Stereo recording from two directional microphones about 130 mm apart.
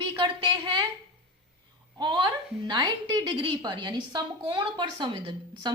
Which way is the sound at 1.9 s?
35° right (ahead or behind).